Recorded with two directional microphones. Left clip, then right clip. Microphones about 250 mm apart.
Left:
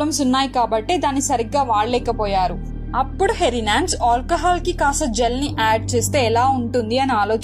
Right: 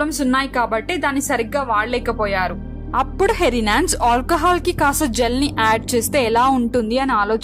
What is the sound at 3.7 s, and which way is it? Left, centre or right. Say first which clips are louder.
A woman's voice: even; right.